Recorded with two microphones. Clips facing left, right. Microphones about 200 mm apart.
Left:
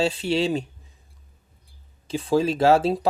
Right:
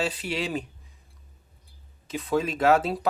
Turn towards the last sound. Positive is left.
turn(degrees=30)  # may be behind; listen again after turning